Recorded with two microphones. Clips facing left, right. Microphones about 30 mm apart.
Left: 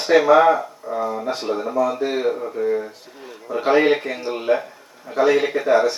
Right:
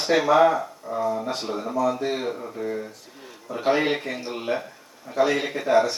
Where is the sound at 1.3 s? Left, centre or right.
Centre.